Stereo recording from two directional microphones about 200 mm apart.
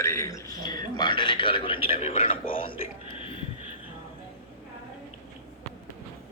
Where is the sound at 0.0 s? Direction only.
15° left (ahead or behind).